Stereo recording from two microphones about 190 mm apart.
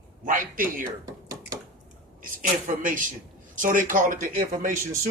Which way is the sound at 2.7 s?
45° right (ahead or behind).